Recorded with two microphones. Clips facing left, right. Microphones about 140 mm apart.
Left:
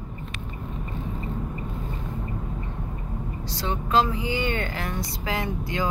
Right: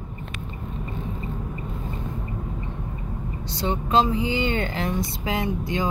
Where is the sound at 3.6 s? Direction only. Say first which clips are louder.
Right 2 dB; 20° right (ahead or behind).